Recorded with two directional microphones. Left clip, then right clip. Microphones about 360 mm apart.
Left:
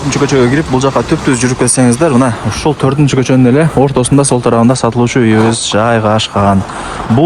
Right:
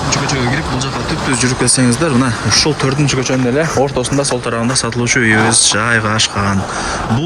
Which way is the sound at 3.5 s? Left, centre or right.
Left.